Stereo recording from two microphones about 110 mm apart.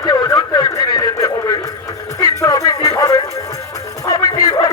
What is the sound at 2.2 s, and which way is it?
Music, 30° left (ahead or behind).